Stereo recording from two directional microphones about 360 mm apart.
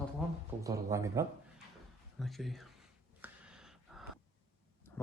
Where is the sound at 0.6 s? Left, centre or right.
Centre.